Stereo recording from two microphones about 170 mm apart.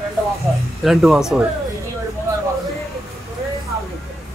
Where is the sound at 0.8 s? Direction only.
Centre (ahead or behind).